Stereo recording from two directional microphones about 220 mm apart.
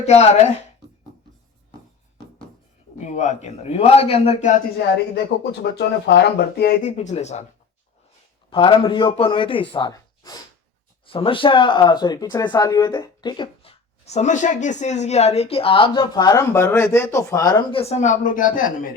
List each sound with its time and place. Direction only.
0.0 s speech: 30° left (ahead or behind)
3.0 s a man's voice: 35° left (ahead or behind)
6.8 s a man's voice: 30° left (ahead or behind)
8.4 s speech: 20° left (ahead or behind); by 18.9 s 40° left (ahead or behind)